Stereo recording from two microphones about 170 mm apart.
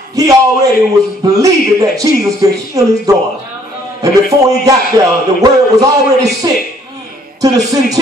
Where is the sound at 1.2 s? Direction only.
20° right (ahead or behind).